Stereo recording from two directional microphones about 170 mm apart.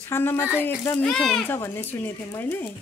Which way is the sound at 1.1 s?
5° left (ahead or behind).